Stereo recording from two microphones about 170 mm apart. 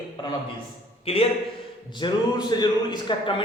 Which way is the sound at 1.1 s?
35° left (ahead or behind).